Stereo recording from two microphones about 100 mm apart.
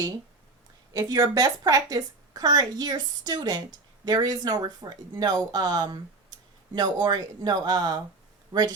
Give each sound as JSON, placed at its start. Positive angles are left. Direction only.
{"t": 0.9, "sound": "speech", "side_deg": -35}
{"t": 8.5, "sound": "speech", "side_deg": -55}